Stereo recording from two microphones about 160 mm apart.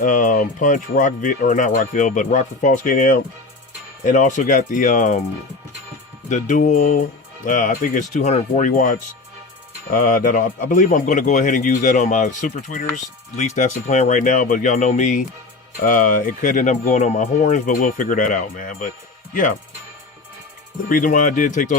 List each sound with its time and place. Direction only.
0.0 s speech: 55° left (ahead or behind)
6.2 s speech: 50° left (ahead or behind)
20.9 s speech: 55° left (ahead or behind)